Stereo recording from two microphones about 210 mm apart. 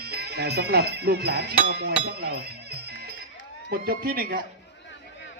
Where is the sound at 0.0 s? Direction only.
50° right (ahead or behind).